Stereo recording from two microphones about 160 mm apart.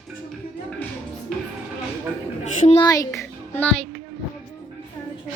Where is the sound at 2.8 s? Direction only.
25° left (ahead or behind).